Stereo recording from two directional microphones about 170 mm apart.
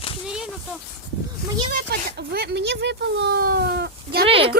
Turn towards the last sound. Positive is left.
turn(degrees=-35)  # may be behind; listen again after turning